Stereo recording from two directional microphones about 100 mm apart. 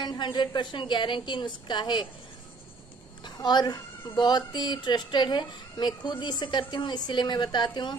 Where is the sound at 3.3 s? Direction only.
45° left (ahead or behind).